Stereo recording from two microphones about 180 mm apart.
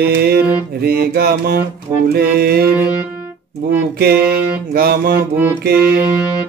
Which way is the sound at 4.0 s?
60° right (ahead or behind).